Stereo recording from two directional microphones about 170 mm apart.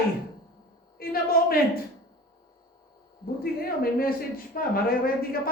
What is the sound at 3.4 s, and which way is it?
Speech, 60° left (ahead or behind).